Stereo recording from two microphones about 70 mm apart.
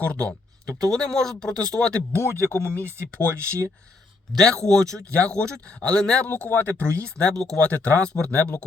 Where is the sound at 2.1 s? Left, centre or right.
Left.